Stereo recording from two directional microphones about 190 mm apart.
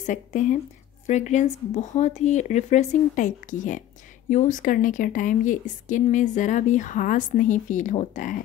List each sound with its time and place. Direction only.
0.0 s a woman's voice: 40° left (ahead or behind)